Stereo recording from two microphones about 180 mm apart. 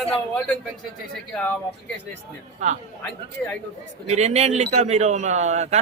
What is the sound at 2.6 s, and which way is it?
Speech, 40° right (ahead or behind).